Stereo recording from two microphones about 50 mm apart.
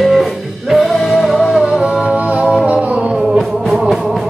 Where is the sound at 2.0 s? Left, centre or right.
Right.